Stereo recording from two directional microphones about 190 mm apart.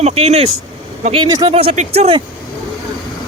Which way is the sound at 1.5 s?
35° right (ahead or behind).